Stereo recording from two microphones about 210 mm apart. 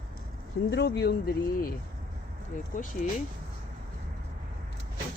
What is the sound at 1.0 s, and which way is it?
Mantra, 50° left (ahead or behind).